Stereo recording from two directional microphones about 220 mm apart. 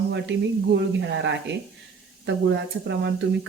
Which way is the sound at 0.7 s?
55° right (ahead or behind).